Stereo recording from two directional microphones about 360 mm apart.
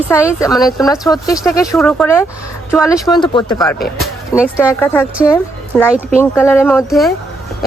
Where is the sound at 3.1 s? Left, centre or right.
Centre.